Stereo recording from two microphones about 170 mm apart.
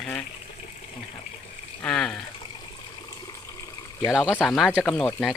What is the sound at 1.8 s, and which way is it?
Speech, 5° left (ahead or behind).